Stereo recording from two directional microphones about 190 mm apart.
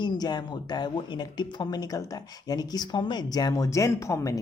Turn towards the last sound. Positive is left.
turn(degrees=15)  # may be behind; listen again after turning